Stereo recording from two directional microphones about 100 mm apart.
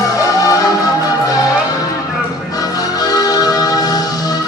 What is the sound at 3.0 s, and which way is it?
Music, 40° left (ahead or behind).